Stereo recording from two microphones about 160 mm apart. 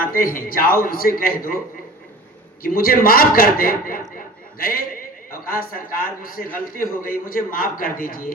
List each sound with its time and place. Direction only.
0.0 s a man's voice: 60° left (ahead or behind)
2.6 s a man's voice: 65° left (ahead or behind)